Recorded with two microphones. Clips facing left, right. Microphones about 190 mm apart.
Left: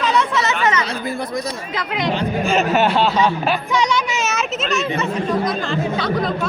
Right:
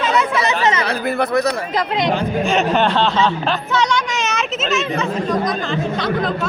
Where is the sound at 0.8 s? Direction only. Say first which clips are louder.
Right 5 dB; 65° right (ahead or behind).